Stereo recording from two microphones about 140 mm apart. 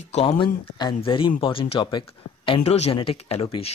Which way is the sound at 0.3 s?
35° left (ahead or behind).